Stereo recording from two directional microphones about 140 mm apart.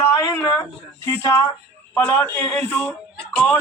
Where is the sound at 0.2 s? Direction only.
20° left (ahead or behind).